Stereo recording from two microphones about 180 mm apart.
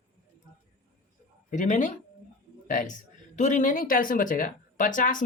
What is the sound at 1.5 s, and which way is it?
A man's voice, 45° left (ahead or behind).